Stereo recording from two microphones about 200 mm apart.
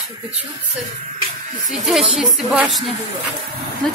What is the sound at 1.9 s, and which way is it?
Speech, centre (ahead or behind).